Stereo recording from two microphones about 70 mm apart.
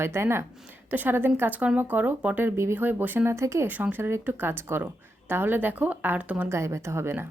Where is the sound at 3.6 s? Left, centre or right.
Right.